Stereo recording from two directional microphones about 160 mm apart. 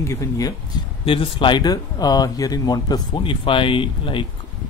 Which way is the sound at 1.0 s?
35° left (ahead or behind).